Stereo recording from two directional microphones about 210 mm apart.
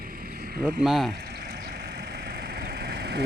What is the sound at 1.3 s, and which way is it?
Vehicle, 45° right (ahead or behind).